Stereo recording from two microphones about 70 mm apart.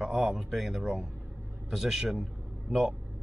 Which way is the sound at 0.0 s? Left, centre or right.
Centre.